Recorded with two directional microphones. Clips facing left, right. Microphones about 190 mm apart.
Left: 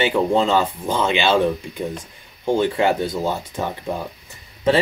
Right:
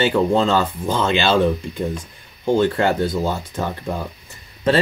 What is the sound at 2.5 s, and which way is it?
Speech, 15° left (ahead or behind).